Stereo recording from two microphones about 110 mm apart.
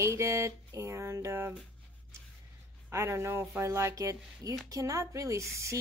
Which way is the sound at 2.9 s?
25° right (ahead or behind).